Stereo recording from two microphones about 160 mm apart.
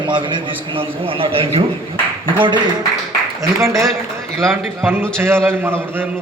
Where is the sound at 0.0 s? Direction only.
30° right (ahead or behind).